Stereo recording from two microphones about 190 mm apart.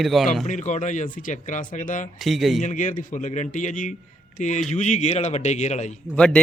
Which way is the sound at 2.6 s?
40° left (ahead or behind).